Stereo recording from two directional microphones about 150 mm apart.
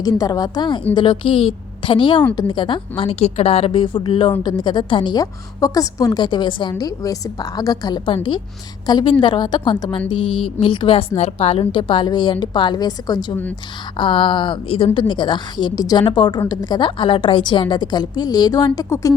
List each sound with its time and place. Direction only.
0.0 s a woman's voice: 25° left (ahead or behind)